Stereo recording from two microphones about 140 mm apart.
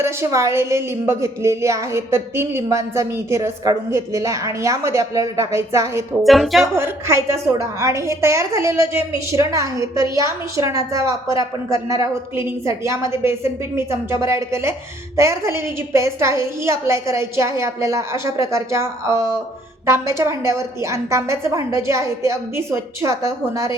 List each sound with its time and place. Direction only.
0.0 s a woman's voice: 20° right (ahead or behind)
6.2 s speech: centre (ahead or behind)
6.7 s a woman's voice: 20° right (ahead or behind)